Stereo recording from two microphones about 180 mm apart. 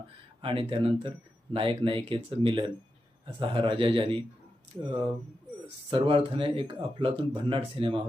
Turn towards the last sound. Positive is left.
turn(degrees=-30)  # may be behind; listen again after turning